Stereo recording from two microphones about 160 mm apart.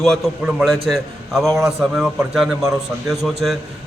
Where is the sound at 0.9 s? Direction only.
Centre (ahead or behind).